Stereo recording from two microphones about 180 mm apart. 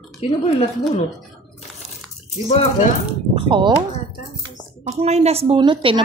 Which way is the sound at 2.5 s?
40° left (ahead or behind).